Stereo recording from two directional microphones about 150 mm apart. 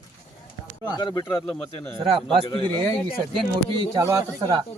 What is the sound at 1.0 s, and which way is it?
Speech, 30° left (ahead or behind).